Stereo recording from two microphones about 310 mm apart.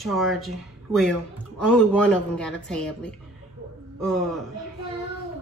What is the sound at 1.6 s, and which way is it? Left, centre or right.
Speech, centre.